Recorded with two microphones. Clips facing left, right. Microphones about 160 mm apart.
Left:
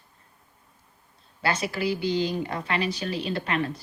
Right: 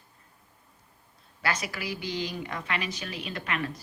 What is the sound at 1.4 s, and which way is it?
A woman's voice, 30° left (ahead or behind).